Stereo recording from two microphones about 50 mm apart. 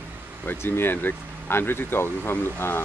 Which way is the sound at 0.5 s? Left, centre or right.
Left.